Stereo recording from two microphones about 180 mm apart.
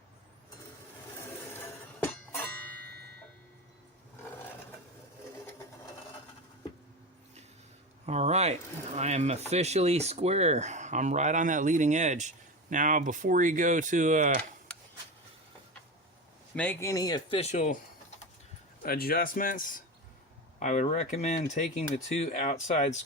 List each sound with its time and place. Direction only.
1.2 s music: 10° left (ahead or behind)
2.8 s music: 65° right (ahead or behind)
8.0 s speech: 35° right (ahead or behind)
14.7 s a sound: 5° left (ahead or behind)
16.6 s speech: 15° left (ahead or behind); by 17.7 s 40° left (ahead or behind)
18.8 s a man's voice: 55° left (ahead or behind); by 23.0 s 40° left (ahead or behind)